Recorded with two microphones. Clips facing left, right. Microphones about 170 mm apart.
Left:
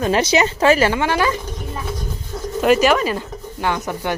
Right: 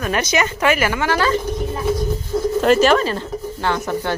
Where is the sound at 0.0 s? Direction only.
30° left (ahead or behind).